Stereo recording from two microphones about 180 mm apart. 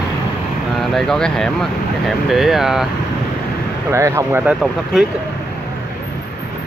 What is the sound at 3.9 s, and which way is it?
Speech, 15° right (ahead or behind).